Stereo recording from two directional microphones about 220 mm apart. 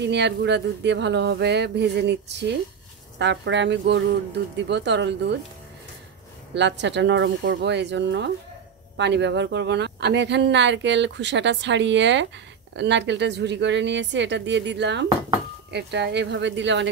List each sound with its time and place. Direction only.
0.0 s speech: 50° right (ahead or behind)
6.5 s speech: 55° right (ahead or behind)